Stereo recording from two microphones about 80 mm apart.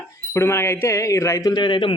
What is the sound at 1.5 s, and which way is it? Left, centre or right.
Speech, left.